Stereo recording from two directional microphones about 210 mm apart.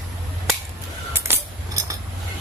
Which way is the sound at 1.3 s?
10° right (ahead or behind).